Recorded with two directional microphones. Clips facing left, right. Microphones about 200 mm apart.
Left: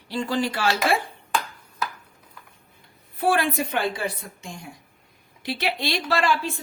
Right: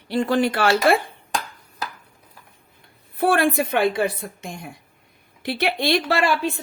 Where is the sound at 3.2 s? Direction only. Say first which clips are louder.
Right 4 dB; 55° right (ahead or behind).